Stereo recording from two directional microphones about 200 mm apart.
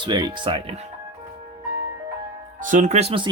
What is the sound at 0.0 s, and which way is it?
Speech, 20° right (ahead or behind).